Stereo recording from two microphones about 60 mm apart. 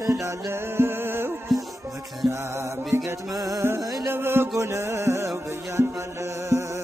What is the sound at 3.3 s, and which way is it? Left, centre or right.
Music, right.